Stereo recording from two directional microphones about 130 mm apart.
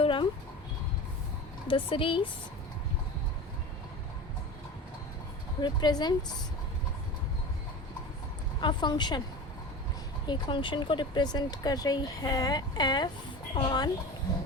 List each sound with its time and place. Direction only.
0.0 s a sound: 40° left (ahead or behind)
1.6 s speech: 45° left (ahead or behind)
5.5 s speech: 35° left (ahead or behind)
8.6 s speech: 35° left (ahead or behind)
10.2 s speech: 35° left (ahead or behind)